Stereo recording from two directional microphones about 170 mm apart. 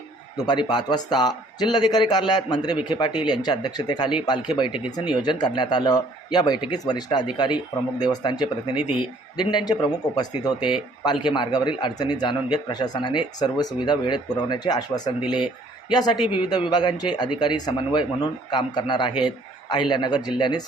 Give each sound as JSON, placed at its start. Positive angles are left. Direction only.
{"t": 0.3, "sound": "speech", "side_deg": 25}
{"t": 8.7, "sound": "speech", "side_deg": -10}
{"t": 9.4, "sound": "speech", "side_deg": 25}